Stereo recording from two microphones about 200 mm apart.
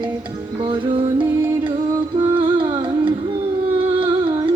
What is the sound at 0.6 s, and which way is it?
Music, 25° right (ahead or behind).